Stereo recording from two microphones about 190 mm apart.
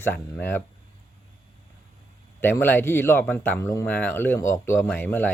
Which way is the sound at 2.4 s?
10° left (ahead or behind).